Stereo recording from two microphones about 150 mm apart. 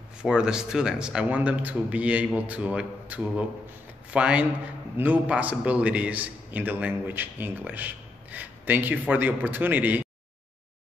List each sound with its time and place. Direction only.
0.2 s a man's voice: 5° right (ahead or behind)